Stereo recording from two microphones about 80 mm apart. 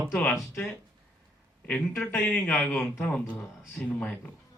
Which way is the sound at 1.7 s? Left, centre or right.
Centre.